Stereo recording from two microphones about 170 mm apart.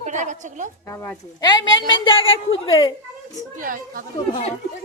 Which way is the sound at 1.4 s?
25° left (ahead or behind).